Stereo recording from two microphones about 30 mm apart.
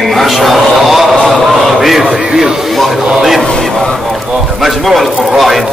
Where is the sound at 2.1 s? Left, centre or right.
Centre.